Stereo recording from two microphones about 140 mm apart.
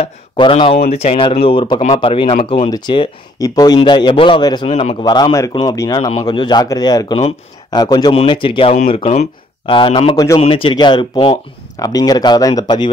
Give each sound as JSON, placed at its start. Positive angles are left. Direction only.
{"t": 0.0, "sound": "speech", "side_deg": 40}
{"t": 4.6, "sound": "a man's voice", "side_deg": 45}
{"t": 5.0, "sound": "speech", "side_deg": 30}
{"t": 9.8, "sound": "speech", "side_deg": 40}
{"t": 10.1, "sound": "speech", "side_deg": 25}
{"t": 10.5, "sound": "speech", "side_deg": 35}